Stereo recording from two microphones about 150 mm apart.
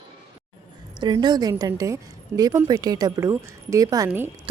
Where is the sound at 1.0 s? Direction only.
30° right (ahead or behind).